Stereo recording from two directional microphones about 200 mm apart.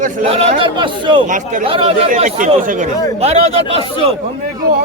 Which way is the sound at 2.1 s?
40° right (ahead or behind).